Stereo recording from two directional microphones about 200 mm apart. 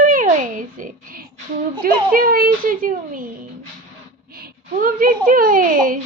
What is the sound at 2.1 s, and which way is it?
A child's voice, 45° right (ahead or behind).